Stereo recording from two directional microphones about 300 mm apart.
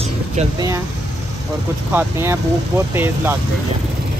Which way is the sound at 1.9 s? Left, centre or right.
Centre.